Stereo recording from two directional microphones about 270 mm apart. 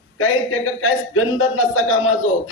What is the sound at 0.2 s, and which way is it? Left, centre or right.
A man's voice, left.